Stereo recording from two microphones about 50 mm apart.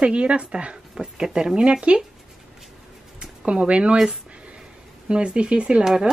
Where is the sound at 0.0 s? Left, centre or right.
Right.